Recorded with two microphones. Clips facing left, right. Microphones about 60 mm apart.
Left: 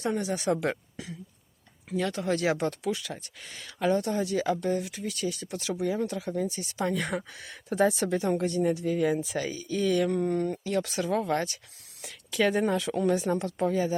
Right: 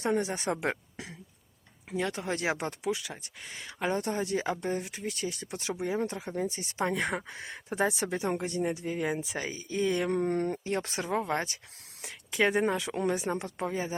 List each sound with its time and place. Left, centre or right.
0.0 s speech: right
1.9 s speech: right
10.1 s speech: right
10.6 s speech: right